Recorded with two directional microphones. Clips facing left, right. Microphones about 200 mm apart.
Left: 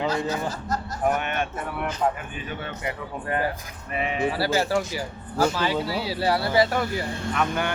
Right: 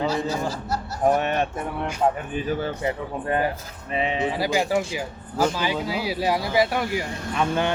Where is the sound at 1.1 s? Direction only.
35° right (ahead or behind); by 7.0 s 10° right (ahead or behind).